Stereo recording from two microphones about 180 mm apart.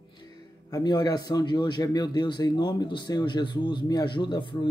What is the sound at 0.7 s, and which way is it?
A man's voice, 20° left (ahead or behind).